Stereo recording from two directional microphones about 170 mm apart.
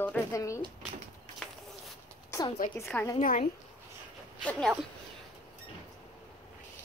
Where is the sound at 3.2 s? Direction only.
50° left (ahead or behind).